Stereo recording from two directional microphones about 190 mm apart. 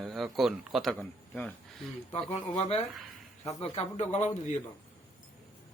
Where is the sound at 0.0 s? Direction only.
Centre (ahead or behind).